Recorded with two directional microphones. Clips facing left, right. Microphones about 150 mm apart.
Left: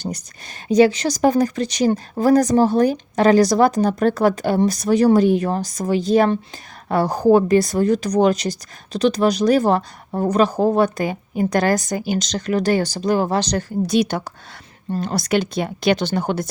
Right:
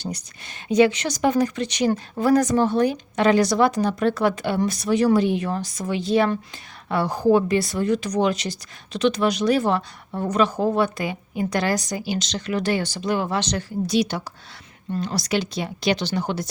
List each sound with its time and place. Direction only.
0.0 s speech: 45° left (ahead or behind)